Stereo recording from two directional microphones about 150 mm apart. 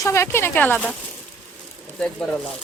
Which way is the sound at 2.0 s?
5° left (ahead or behind).